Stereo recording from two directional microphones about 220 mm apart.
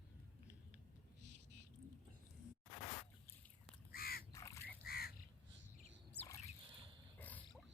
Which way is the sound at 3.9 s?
45° left (ahead or behind).